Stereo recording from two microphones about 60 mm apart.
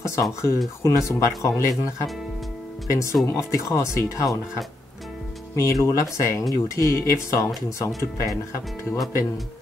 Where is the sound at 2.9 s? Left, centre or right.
Left.